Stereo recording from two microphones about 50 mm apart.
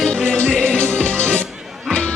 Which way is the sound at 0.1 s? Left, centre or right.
Centre.